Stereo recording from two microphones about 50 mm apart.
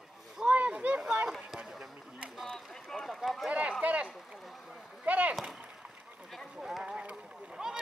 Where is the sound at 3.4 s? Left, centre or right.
Right.